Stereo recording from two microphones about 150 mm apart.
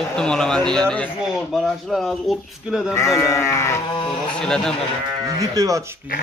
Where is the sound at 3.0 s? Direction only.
20° left (ahead or behind).